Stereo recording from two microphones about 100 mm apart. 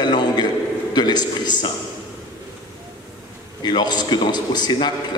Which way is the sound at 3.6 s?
45° left (ahead or behind).